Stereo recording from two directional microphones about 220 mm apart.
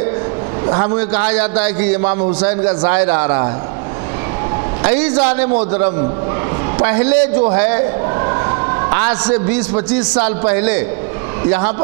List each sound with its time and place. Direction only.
0.7 s a man's voice: 25° right (ahead or behind)
0.9 s a man's voice: 10° right (ahead or behind)
4.8 s a man's voice: 10° right (ahead or behind)
6.8 s a man's voice: 10° right (ahead or behind)
8.2 s a sound: 20° right (ahead or behind)
9.8 s a man's voice: 10° right (ahead or behind)